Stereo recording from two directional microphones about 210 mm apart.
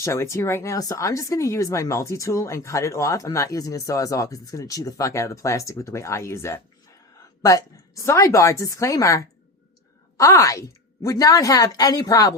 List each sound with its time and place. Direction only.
0.0 s speech: 15° left (ahead or behind)